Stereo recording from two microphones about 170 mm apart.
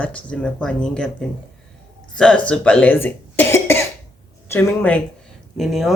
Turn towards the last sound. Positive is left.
turn(degrees=0)  # may be behind; listen again after turning